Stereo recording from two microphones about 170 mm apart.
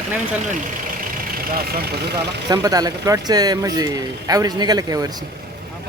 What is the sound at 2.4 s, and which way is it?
Speech, 20° right (ahead or behind).